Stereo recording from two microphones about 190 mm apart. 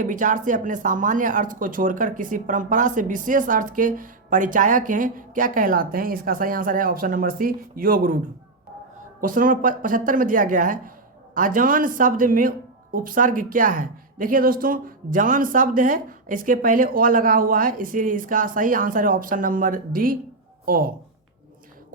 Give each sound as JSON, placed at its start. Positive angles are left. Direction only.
{"t": 0.0, "sound": "a woman's voice", "side_deg": -45}
{"t": 9.2, "sound": "a woman's voice", "side_deg": -45}